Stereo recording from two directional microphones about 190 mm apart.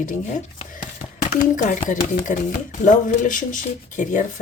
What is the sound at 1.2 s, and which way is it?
Speech, 45° left (ahead or behind).